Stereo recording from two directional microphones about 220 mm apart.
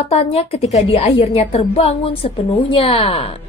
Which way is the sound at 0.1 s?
25° left (ahead or behind).